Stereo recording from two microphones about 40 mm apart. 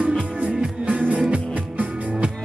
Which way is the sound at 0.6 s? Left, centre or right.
Right.